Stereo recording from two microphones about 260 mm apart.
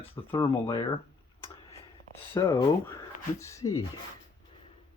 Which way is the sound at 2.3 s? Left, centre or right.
Centre.